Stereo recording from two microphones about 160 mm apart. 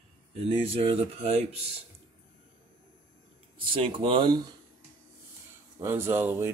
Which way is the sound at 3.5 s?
35° right (ahead or behind).